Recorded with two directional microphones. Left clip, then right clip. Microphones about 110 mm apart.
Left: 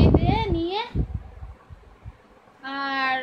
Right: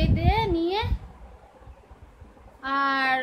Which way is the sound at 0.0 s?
5° left (ahead or behind).